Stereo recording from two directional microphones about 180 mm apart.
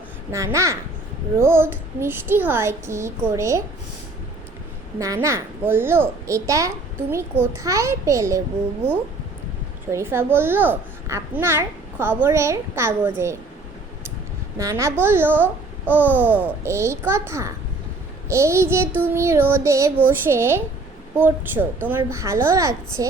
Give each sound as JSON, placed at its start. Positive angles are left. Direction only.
{"t": 0.3, "sound": "a child's voice", "side_deg": -15}
{"t": 4.9, "sound": "a child's voice", "side_deg": -20}
{"t": 9.9, "sound": "a child's voice", "side_deg": -15}
{"t": 14.6, "sound": "a child's voice", "side_deg": -15}